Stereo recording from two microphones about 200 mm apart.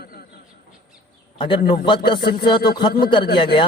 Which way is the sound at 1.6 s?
50° left (ahead or behind).